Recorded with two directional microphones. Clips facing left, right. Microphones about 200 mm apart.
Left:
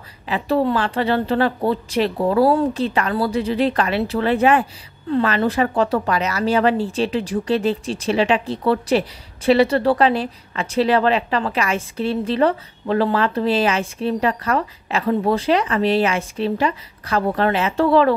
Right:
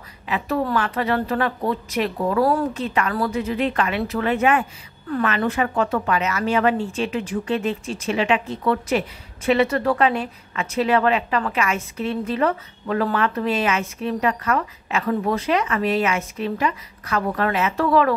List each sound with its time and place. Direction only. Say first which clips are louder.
0.3 s speech: left 4 dB; 30° left (ahead or behind)